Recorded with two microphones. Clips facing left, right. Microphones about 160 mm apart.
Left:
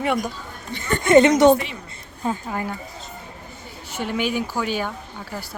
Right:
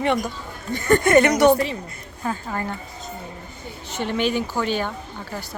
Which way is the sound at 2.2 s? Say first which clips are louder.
Left 1 dB; 15° left (ahead or behind).